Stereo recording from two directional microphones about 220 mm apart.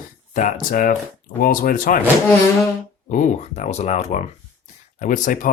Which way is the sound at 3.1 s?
35° left (ahead or behind).